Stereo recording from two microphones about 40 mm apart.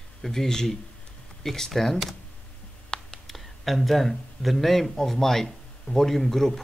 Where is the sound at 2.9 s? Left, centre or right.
Left.